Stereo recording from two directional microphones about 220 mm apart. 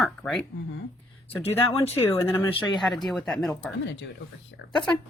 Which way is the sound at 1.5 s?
25° left (ahead or behind).